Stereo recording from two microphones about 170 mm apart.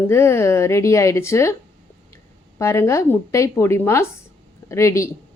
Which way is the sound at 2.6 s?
15° left (ahead or behind).